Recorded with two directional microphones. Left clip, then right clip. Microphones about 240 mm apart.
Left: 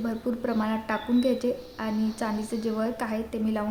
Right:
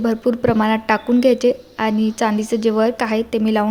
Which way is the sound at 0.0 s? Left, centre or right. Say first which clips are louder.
Right 12 dB; right.